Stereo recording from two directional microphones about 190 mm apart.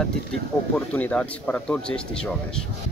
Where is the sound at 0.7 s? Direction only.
10° left (ahead or behind).